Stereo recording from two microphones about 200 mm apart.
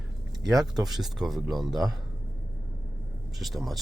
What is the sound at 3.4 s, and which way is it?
Speech, centre (ahead or behind).